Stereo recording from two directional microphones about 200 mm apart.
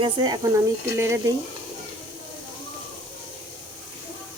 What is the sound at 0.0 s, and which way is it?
Speech, 20° right (ahead or behind).